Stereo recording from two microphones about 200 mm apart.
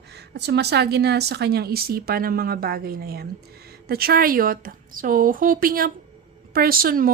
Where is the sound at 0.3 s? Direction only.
55° right (ahead or behind).